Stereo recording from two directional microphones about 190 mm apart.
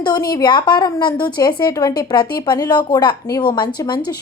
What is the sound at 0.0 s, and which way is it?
A woman's voice, 20° left (ahead or behind).